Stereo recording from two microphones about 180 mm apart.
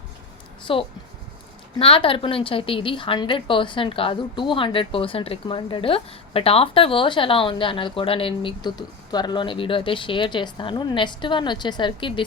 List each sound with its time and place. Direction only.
0.7 s a woman's voice: 30° left (ahead or behind)